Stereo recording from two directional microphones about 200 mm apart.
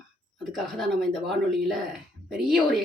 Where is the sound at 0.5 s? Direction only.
Centre (ahead or behind).